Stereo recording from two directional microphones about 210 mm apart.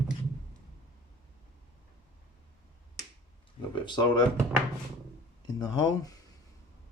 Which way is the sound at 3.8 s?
20° left (ahead or behind).